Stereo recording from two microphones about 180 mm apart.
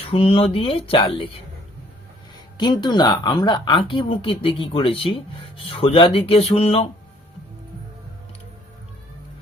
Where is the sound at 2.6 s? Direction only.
25° left (ahead or behind).